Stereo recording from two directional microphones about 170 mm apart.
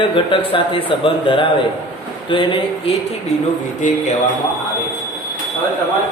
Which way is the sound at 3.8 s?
45° left (ahead or behind).